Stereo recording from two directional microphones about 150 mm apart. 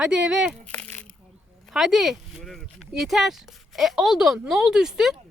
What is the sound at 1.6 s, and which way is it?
Speech, centre (ahead or behind).